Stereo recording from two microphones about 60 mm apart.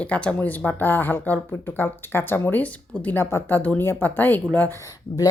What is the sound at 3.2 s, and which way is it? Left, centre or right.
Speech, left.